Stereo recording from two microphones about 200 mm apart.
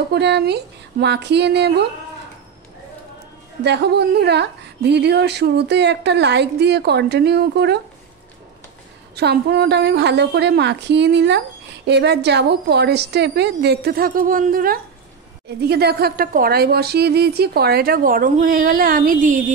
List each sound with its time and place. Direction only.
0.1 s a woman's voice: 55° right (ahead or behind)
3.6 s a woman's voice: 55° right (ahead or behind)
9.1 s a woman's voice: 55° right (ahead or behind)